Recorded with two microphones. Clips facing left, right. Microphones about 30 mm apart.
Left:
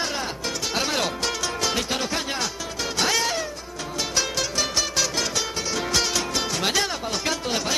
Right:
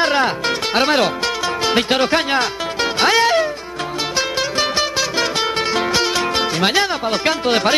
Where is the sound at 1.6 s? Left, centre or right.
Right.